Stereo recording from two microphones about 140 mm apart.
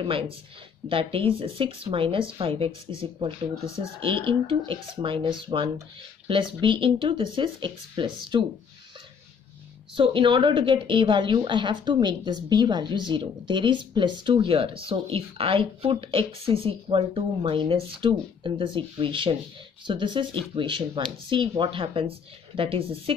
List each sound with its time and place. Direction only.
0.0 s a woman's voice: 40° right (ahead or behind)
3.6 s speech: 20° left (ahead or behind)
4.0 s a woman's voice: 35° right (ahead or behind)
9.9 s a woman's voice: 35° right (ahead or behind)